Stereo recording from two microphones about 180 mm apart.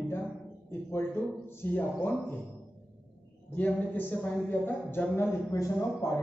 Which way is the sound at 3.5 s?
10° left (ahead or behind).